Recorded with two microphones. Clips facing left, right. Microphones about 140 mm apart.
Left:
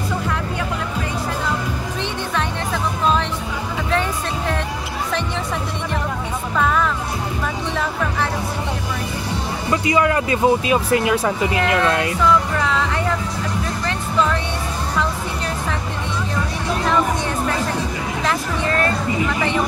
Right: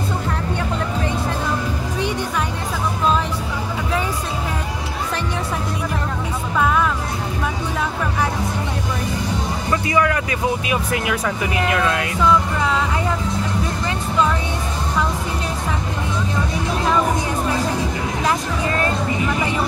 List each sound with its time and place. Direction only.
9.7 s speech: 20° left (ahead or behind)